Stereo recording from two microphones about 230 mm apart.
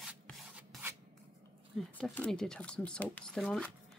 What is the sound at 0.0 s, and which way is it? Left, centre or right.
Rub, centre.